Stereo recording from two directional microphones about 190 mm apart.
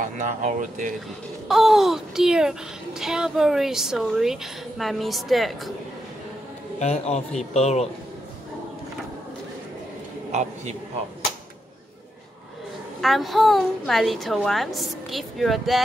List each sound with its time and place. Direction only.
0.0 s speech: 40° right (ahead or behind)
1.5 s speech: centre (ahead or behind)
6.8 s a man's voice: 35° left (ahead or behind)
10.3 s a man's voice: 35° right (ahead or behind)
13.0 s speech: centre (ahead or behind)